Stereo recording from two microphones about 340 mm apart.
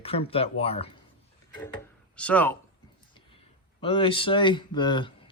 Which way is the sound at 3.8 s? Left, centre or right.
Centre.